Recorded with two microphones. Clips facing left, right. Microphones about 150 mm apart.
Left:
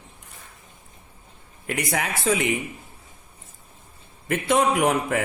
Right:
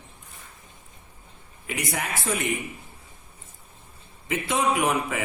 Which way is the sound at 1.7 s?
70° left (ahead or behind).